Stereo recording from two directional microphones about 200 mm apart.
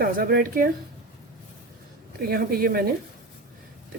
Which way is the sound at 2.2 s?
50° right (ahead or behind).